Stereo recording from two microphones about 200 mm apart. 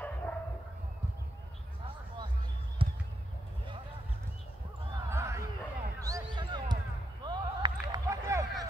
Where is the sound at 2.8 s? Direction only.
25° right (ahead or behind).